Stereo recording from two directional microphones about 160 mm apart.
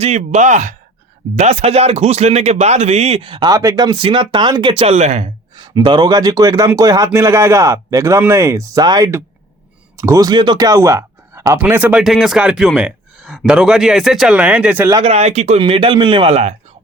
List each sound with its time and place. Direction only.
0.0 s speech: 45° right (ahead or behind)
5.5 s a man's voice: 25° right (ahead or behind); by 14.8 s 10° right (ahead or behind)
15.0 s speech: 40° right (ahead or behind)